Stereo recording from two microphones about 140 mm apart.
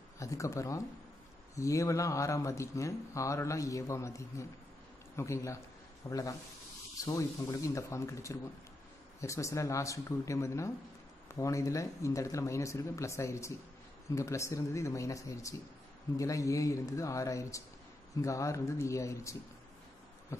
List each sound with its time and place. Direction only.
0.2 s speech: 20° left (ahead or behind)